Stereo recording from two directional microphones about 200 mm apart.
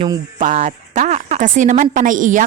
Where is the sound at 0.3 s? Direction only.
35° right (ahead or behind).